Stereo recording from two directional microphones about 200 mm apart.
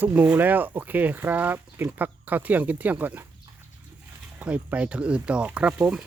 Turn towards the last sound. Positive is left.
turn(degrees=-5)  # may be behind; listen again after turning